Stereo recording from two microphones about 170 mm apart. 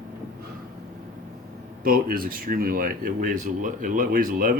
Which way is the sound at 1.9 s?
60° right (ahead or behind).